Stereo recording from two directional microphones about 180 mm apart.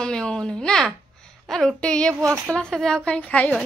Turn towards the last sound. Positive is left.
turn(degrees=10)  # may be behind; listen again after turning